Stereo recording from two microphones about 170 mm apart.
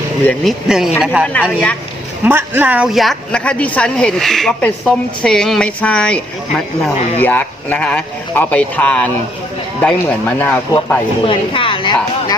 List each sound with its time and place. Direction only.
0.3 s speech: centre (ahead or behind)
2.2 s speech: 10° right (ahead or behind); by 10.6 s 10° left (ahead or behind)
11.2 s a woman's voice: 30° left (ahead or behind)